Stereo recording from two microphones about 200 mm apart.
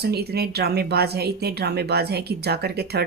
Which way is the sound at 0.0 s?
55° right (ahead or behind).